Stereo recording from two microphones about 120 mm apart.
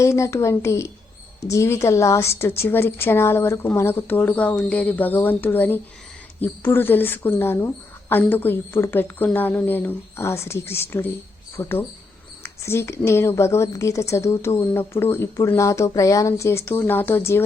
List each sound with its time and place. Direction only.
0.0 s a woman's voice: 25° left (ahead or behind)
12.4 s a sound: 20° left (ahead or behind)
13.1 s a woman's voice: 20° left (ahead or behind)